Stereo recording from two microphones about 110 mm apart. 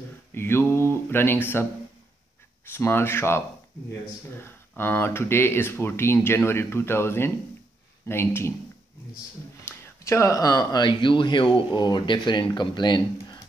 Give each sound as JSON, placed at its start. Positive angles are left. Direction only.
{"t": 0.3, "sound": "a sound", "side_deg": 20}
{"t": 2.7, "sound": "speech", "side_deg": 20}
{"t": 9.7, "sound": "speech", "side_deg": 25}